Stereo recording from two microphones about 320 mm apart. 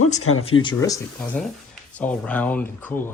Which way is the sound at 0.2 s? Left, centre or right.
Left.